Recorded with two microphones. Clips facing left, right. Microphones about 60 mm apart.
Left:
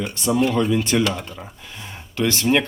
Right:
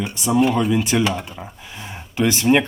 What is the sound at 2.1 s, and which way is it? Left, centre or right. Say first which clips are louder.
Speech: right 3 dB; centre.